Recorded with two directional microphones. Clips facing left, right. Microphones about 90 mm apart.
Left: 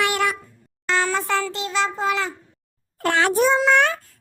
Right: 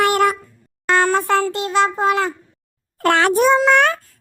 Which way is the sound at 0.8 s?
50° right (ahead or behind).